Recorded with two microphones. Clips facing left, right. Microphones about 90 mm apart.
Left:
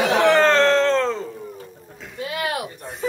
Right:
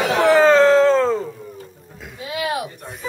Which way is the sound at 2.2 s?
50° left (ahead or behind).